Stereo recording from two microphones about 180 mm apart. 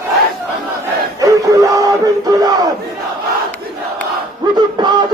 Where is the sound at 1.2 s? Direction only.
20° right (ahead or behind).